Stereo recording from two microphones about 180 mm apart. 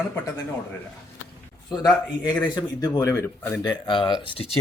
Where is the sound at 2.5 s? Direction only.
20° left (ahead or behind).